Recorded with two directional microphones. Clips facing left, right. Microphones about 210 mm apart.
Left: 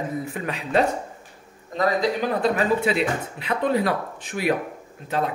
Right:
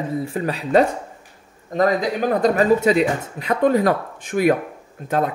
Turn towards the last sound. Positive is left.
turn(degrees=-50)  # may be behind; listen again after turning